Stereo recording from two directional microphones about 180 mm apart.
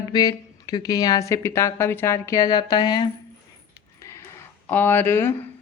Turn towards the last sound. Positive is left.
turn(degrees=15)  # may be behind; listen again after turning